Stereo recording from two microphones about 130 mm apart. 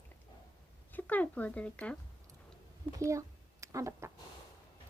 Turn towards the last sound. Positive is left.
turn(degrees=-20)  # may be behind; listen again after turning